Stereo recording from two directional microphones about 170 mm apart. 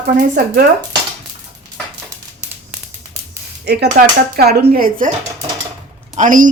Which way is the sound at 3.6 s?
75° right (ahead or behind).